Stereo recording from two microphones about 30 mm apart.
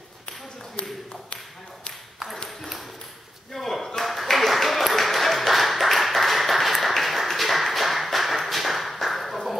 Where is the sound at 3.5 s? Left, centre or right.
Centre.